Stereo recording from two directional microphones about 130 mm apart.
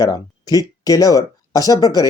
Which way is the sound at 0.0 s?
30° left (ahead or behind).